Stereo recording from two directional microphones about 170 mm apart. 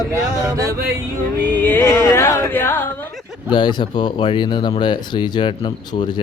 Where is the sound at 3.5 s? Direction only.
25° left (ahead or behind).